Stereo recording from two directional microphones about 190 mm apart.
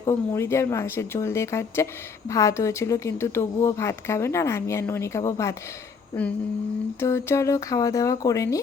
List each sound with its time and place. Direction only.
0.0 s speech: 15° left (ahead or behind)
7.0 s speech: 15° left (ahead or behind)